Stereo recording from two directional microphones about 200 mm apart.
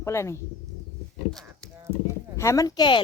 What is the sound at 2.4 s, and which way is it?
Speech, 15° left (ahead or behind).